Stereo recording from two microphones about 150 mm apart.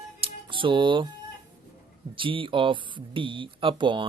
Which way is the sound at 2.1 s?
35° right (ahead or behind).